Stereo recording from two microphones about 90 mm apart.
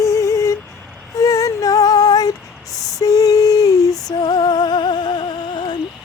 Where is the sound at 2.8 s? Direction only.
40° left (ahead or behind).